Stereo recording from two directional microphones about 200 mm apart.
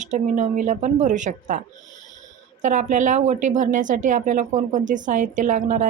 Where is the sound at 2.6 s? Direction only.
40° right (ahead or behind).